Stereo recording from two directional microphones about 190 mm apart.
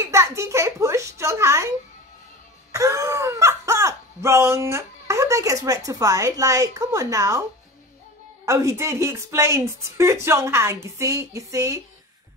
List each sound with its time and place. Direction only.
0.0 s a sound: 15° right (ahead or behind)
2.7 s wail: 15° right (ahead or behind)
8.5 s speech: 15° right (ahead or behind)